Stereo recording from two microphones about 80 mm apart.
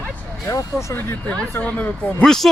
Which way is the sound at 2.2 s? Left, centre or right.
Centre.